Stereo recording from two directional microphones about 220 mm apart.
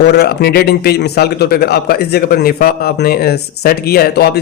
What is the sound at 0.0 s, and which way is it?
A man's voice, 50° left (ahead or behind).